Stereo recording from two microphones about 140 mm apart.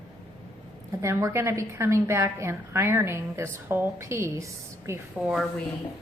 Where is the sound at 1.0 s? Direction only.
20° right (ahead or behind).